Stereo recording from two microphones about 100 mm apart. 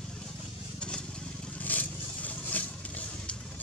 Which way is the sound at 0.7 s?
10° left (ahead or behind).